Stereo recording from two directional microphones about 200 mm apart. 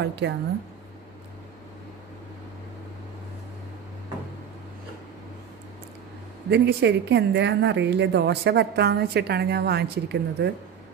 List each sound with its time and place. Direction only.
0.0 s speech: 60° right (ahead or behind)
6.5 s speech: 55° right (ahead or behind)